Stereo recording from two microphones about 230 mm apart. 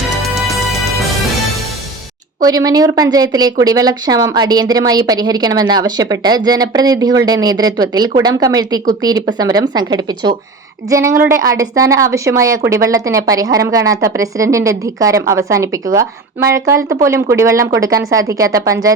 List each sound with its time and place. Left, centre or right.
0.3 s music: centre
2.4 s speech: centre